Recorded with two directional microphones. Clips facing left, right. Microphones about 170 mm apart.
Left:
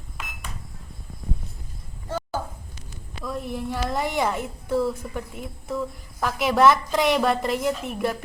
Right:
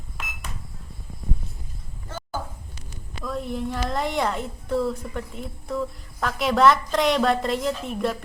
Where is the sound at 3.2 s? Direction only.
5° left (ahead or behind).